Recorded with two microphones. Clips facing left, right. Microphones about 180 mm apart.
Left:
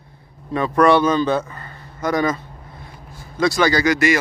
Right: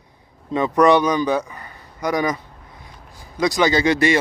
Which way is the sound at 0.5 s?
20° right (ahead or behind).